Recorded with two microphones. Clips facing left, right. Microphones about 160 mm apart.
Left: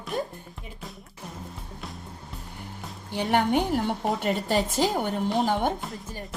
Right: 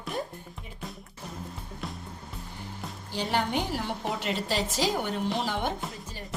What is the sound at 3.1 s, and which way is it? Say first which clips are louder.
A woman's voice: left 5 dB; 60° left (ahead or behind).